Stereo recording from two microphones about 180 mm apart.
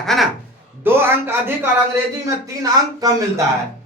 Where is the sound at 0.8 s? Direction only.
10° right (ahead or behind).